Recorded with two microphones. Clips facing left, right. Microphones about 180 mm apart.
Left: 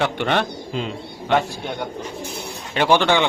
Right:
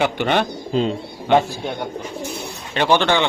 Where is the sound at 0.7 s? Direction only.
35° right (ahead or behind).